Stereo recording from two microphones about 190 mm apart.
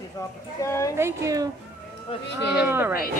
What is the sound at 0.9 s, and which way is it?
Speech, 15° right (ahead or behind).